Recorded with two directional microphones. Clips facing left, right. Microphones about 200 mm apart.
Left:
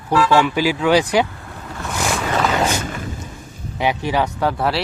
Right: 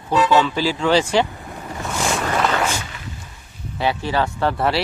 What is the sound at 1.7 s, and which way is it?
Vehicle, 15° right (ahead or behind).